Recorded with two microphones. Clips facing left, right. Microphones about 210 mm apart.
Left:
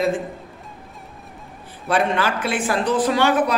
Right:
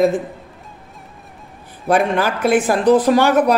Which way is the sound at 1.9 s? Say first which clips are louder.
Right 4 dB; 45° right (ahead or behind).